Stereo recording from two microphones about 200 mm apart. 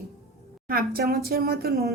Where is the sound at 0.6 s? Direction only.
45° right (ahead or behind).